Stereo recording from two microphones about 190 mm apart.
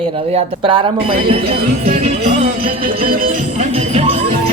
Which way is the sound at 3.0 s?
45° right (ahead or behind).